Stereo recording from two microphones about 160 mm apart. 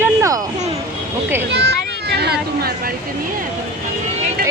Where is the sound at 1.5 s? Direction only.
90° right; by 2.9 s 70° right (ahead or behind).